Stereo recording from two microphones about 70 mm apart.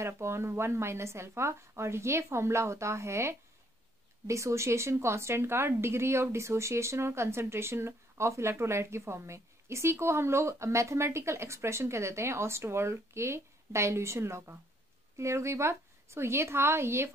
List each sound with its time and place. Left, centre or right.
0.0 s a woman's voice: right